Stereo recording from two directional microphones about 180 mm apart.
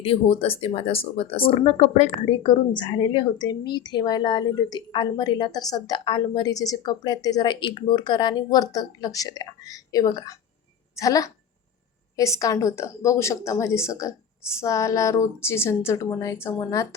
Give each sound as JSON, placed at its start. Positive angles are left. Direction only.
{"t": 0.0, "sound": "a woman's voice", "side_deg": 30}